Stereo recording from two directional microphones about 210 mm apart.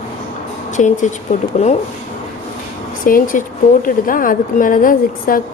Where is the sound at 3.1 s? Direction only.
40° left (ahead or behind).